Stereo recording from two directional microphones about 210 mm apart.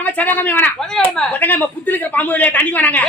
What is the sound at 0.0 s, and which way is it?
A man's voice, 10° left (ahead or behind).